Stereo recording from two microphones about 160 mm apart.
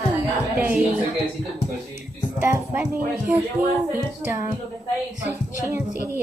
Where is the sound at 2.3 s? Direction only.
15° right (ahead or behind).